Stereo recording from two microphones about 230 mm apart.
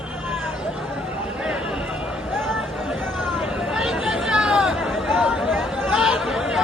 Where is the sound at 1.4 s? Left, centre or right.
Centre.